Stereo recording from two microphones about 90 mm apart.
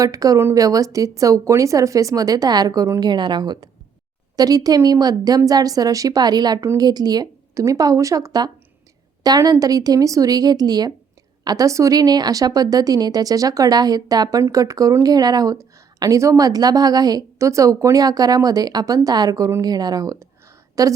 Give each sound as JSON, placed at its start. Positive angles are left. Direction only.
{"t": 0.0, "sound": "speech", "side_deg": -40}
{"t": 3.1, "sound": "speech", "side_deg": -55}
{"t": 4.4, "sound": "speech", "side_deg": -45}